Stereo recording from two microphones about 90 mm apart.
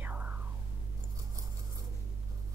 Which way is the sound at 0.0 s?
20° right (ahead or behind).